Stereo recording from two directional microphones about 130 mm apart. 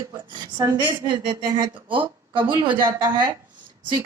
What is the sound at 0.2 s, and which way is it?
A woman's voice, 35° right (ahead or behind).